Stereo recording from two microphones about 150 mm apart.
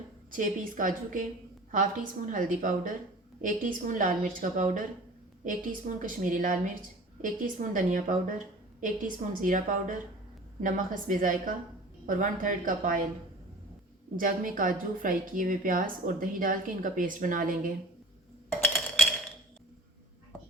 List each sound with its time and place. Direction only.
0.3 s a woman's voice: 65° right (ahead or behind)
14.2 s a woman's voice: 65° right (ahead or behind)